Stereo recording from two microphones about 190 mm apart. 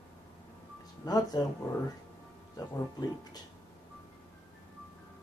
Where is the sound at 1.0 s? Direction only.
20° left (ahead or behind).